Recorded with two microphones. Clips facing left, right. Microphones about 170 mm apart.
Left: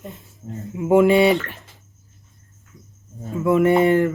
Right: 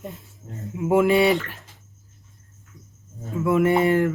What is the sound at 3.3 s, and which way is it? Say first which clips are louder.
Speech: left 3 dB; centre (ahead or behind).